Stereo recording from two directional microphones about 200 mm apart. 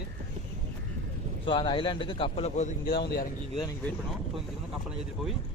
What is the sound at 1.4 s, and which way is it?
A man's voice, 25° left (ahead or behind).